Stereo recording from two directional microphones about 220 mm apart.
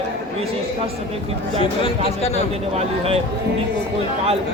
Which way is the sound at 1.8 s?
30° left (ahead or behind).